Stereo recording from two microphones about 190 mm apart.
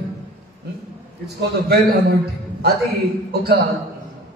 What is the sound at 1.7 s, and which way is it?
Speech, 55° right (ahead or behind).